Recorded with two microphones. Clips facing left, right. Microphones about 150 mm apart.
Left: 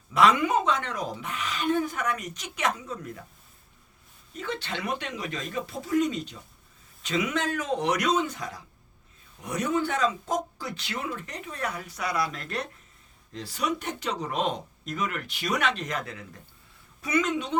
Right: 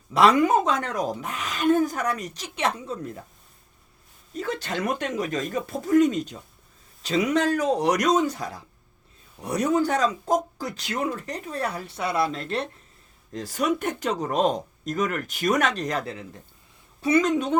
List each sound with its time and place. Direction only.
0.1 s speech: 35° right (ahead or behind)
4.4 s speech: 40° right (ahead or behind)
7.0 s speech: 35° right (ahead or behind)
13.3 s speech: 45° right (ahead or behind)